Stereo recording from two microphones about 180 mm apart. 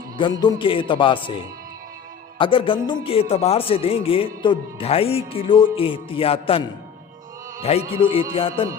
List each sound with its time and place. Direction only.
0.2 s speech: 25° left (ahead or behind)